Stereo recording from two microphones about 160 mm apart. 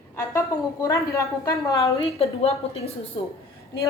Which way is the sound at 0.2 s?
20° left (ahead or behind).